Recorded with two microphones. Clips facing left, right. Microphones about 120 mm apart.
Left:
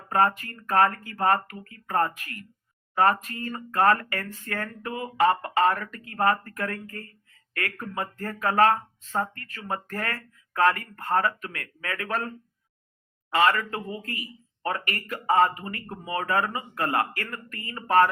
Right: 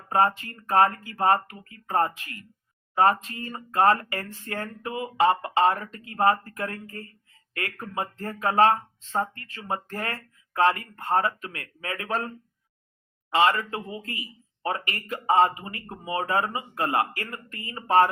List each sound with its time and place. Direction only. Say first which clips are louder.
0.1 s a man's voice: even; 25° right (ahead or behind)
13.3 s a man's voice: even; 25° right (ahead or behind)